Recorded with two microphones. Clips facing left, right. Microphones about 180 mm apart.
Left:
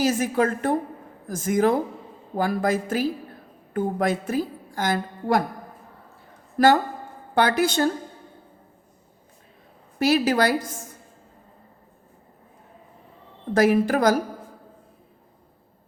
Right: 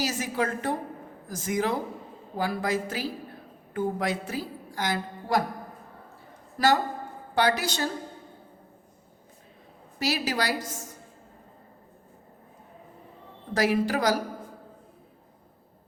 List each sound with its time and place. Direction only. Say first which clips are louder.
0.0 s a woman's voice: left 7 dB; 50° left (ahead or behind)
7.3 s a woman's voice: left 5 dB; 55° left (ahead or behind)
10.0 s a woman's voice: left 8 dB; 50° left (ahead or behind)
13.5 s a woman's voice: left 6 dB; 50° left (ahead or behind)